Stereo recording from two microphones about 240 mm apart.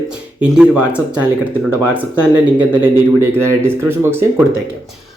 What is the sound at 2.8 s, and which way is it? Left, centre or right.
Speech, centre.